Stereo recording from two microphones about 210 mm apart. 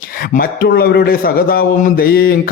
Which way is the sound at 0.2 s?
45° left (ahead or behind).